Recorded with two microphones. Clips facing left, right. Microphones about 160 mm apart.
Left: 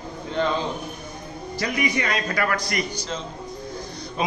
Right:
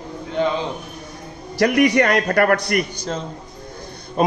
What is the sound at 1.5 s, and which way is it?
A man's voice, 70° right (ahead or behind).